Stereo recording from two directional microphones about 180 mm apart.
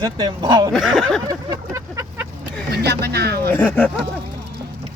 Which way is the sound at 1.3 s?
20° right (ahead or behind).